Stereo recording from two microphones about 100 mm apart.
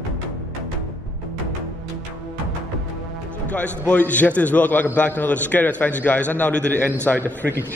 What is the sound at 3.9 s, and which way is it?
A man's voice, 15° left (ahead or behind).